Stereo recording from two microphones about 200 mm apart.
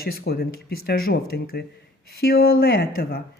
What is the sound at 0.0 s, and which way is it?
Speech, 50° left (ahead or behind).